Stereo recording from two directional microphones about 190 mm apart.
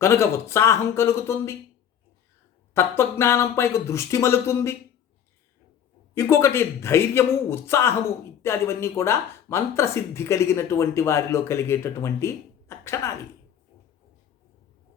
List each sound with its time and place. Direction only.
0.0 s speech: 15° left (ahead or behind)
2.7 s speech: 15° left (ahead or behind)
6.1 s speech: 15° left (ahead or behind)